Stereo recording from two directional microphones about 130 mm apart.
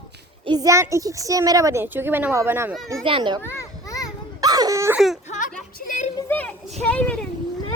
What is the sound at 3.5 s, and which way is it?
Children playing, 25° left (ahead or behind).